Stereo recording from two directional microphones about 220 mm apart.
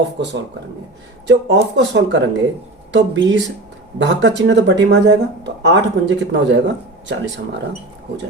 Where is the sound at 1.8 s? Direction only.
55° right (ahead or behind).